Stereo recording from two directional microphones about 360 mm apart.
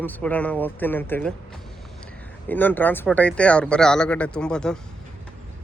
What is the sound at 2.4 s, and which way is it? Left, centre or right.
Speech, centre.